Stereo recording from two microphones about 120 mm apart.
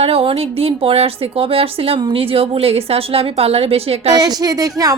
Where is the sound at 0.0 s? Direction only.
55° right (ahead or behind).